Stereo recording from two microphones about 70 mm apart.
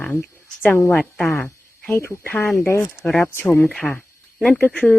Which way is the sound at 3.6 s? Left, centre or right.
Centre.